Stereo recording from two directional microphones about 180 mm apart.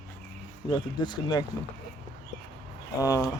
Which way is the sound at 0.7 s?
25° left (ahead or behind).